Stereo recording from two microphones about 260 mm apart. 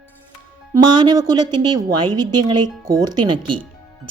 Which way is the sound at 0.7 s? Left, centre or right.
Centre.